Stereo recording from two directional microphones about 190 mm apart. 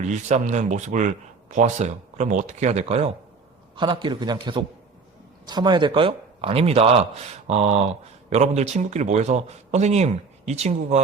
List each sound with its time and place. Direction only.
0.0 s speech: 40° right (ahead or behind)
3.8 s a man's voice: 25° right (ahead or behind)